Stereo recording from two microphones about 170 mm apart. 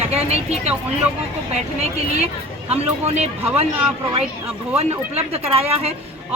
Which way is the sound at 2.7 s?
40° right (ahead or behind).